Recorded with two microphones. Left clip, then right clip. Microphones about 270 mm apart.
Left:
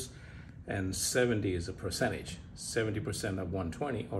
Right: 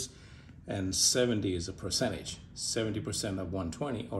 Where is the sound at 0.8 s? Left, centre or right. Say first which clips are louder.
Right 3 dB; right.